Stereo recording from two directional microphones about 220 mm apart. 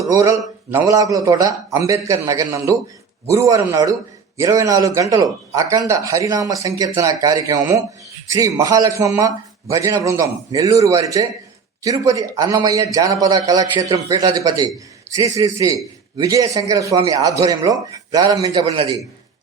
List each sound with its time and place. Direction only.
0.1 s a man's voice: 15° right (ahead or behind)